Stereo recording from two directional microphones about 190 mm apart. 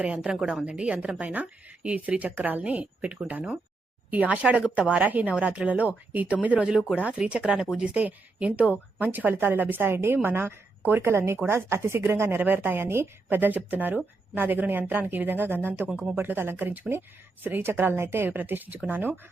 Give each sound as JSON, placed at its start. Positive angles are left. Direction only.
{"t": 0.0, "sound": "a woman's voice", "side_deg": -5}